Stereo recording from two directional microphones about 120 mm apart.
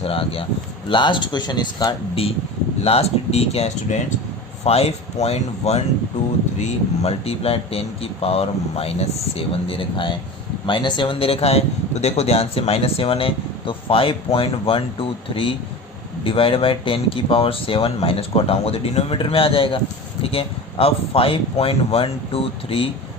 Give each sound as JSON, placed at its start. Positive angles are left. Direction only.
{"t": 0.0, "sound": "speech", "side_deg": 50}
{"t": 2.8, "sound": "speech", "side_deg": 55}